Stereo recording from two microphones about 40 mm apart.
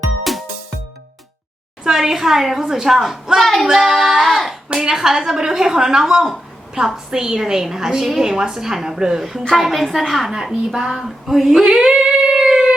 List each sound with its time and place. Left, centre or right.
0.3 s music: centre
1.8 s a woman's voice: centre
3.4 s child singing: centre
3.7 s child singing: centre
4.7 s a woman's voice: centre
9.6 s child singing: centre
10.3 s a woman's voice: centre
12.3 s a sound: centre